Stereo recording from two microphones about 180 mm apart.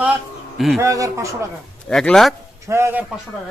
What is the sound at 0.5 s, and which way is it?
Speech, centre (ahead or behind).